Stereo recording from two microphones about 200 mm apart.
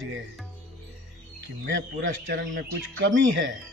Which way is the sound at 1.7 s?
70° right (ahead or behind).